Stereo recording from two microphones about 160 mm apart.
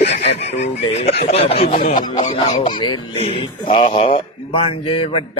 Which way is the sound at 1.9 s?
25° left (ahead or behind).